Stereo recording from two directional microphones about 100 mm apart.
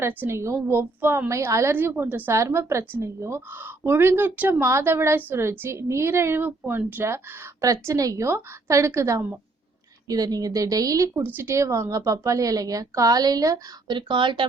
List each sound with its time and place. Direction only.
0.0 s a woman's voice: 20° right (ahead or behind)
7.6 s speech: 35° right (ahead or behind)
10.1 s speech: 40° right (ahead or behind)
13.9 s speech: 55° right (ahead or behind)